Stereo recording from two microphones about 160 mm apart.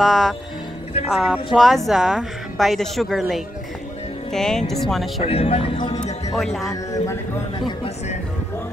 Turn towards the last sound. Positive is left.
turn(degrees=30)  # may be behind; listen again after turning